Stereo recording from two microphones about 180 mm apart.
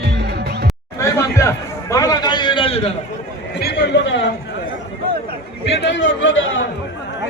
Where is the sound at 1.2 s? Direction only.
15° left (ahead or behind); by 2.9 s 30° left (ahead or behind).